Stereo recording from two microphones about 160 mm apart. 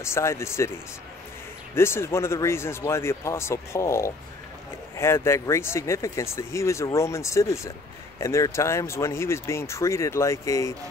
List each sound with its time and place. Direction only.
0.0 s speech: 15° left (ahead or behind)
1.8 s speech: 15° left (ahead or behind)